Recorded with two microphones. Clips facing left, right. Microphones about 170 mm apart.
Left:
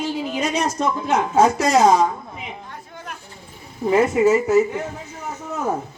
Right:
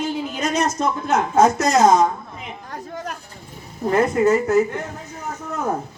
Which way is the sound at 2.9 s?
40° right (ahead or behind).